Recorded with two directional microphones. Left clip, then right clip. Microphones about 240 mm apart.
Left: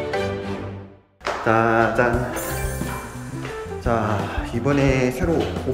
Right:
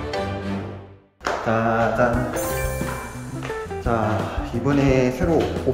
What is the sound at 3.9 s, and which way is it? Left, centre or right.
Music, centre.